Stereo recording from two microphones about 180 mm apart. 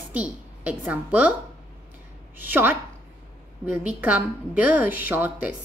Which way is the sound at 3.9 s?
10° right (ahead or behind).